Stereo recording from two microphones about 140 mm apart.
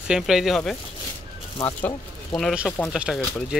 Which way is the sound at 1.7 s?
10° left (ahead or behind).